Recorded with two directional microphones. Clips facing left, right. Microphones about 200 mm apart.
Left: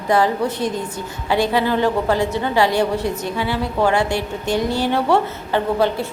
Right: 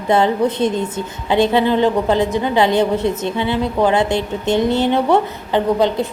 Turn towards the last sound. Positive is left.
turn(degrees=-20)  # may be behind; listen again after turning